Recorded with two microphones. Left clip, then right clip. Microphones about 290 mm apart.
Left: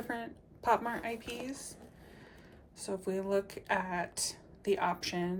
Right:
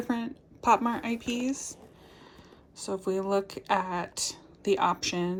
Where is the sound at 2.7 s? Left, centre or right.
Centre.